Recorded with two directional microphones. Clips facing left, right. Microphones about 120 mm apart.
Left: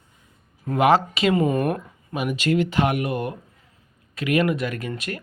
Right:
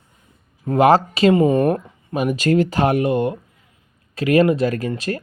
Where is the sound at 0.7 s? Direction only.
40° right (ahead or behind).